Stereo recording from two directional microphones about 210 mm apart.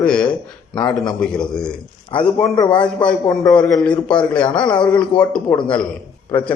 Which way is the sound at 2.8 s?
5° left (ahead or behind).